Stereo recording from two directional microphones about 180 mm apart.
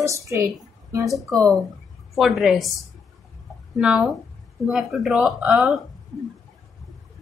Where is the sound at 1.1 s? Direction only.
Centre (ahead or behind).